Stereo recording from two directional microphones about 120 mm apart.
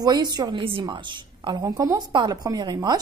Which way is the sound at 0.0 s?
35° right (ahead or behind).